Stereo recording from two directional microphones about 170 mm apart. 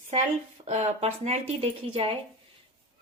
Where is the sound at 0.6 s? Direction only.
40° right (ahead or behind).